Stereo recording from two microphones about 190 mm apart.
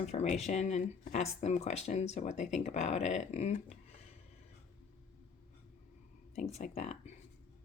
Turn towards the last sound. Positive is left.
turn(degrees=35)  # may be behind; listen again after turning